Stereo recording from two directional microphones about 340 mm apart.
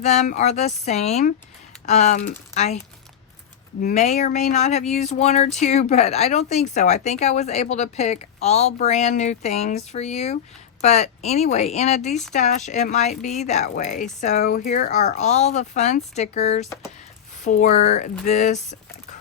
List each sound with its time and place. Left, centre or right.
0.0 s speech: centre